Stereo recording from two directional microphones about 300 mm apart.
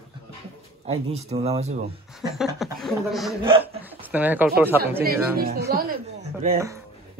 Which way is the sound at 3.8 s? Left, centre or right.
Centre.